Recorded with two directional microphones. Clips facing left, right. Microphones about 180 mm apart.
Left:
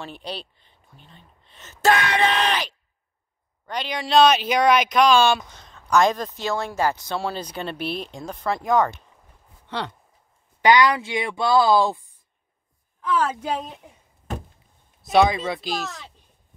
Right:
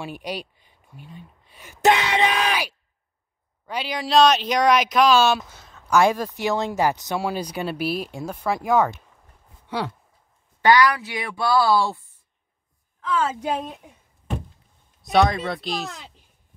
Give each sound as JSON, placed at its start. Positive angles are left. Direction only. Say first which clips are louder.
{"t": 0.0, "sound": "speech", "louder": "right 3 dB", "side_deg": -10}
{"t": 2.4, "sound": "speech", "louder": "even", "side_deg": -10}
{"t": 10.6, "sound": "speech", "louder": "even", "side_deg": 20}
{"t": 15.0, "sound": "speech", "louder": "left 1 dB", "side_deg": 0}